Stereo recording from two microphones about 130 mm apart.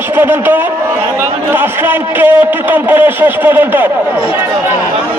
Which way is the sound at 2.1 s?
15° right (ahead or behind).